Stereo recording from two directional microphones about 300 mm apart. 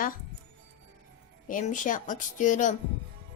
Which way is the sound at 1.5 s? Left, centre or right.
Left.